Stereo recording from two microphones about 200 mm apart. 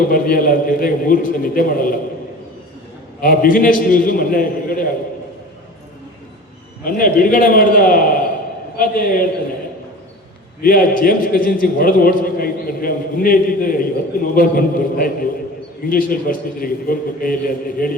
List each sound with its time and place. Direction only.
0.1 s a man's voice: 45° left (ahead or behind)
3.2 s a man's voice: 45° left (ahead or behind)
6.8 s a man's voice: 45° left (ahead or behind)
10.6 s a man's voice: 45° left (ahead or behind)